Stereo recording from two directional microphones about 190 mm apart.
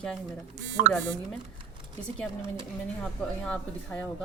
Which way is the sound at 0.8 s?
40° right (ahead or behind).